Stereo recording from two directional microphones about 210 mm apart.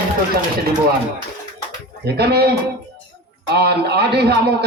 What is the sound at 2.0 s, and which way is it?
Speech, 50° right (ahead or behind).